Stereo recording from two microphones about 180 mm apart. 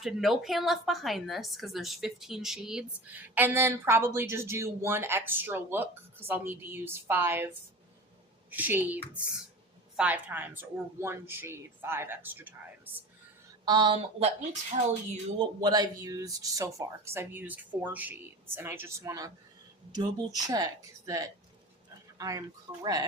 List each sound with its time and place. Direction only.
0.0 s a woman's voice: centre (ahead or behind)
13.7 s speech: 25° right (ahead or behind)
14.7 s speech: 40° right (ahead or behind)
15.4 s a woman's voice: 20° right (ahead or behind)
22.2 s speech: 20° right (ahead or behind)